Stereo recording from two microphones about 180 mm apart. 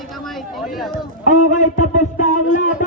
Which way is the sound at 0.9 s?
45° left (ahead or behind).